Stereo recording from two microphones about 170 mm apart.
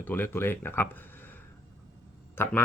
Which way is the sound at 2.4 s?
15° left (ahead or behind).